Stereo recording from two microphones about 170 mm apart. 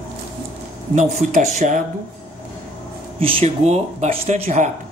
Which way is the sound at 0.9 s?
45° right (ahead or behind).